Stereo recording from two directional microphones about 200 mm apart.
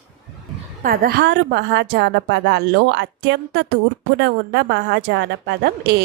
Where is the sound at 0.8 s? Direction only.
45° right (ahead or behind).